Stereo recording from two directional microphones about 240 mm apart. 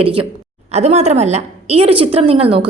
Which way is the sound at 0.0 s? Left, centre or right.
Right.